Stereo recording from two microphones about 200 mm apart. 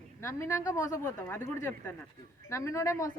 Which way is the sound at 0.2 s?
15° left (ahead or behind).